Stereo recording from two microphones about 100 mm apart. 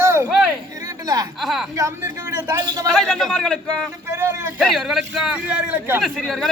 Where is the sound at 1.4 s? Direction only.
5° right (ahead or behind).